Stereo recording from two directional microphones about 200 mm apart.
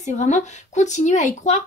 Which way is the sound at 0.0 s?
35° left (ahead or behind).